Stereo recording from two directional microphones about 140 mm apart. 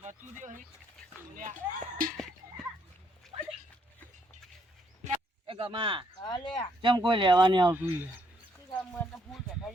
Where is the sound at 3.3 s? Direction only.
40° right (ahead or behind).